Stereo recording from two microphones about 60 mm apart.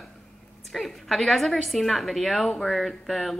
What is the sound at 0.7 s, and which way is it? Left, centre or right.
Speech, centre.